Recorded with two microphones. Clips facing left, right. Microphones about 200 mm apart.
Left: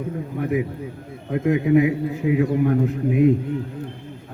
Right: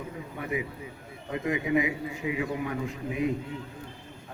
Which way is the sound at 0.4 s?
55° left (ahead or behind).